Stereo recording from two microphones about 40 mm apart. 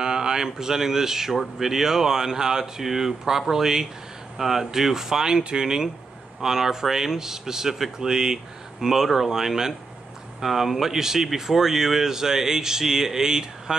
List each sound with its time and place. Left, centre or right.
0.0 s speech: centre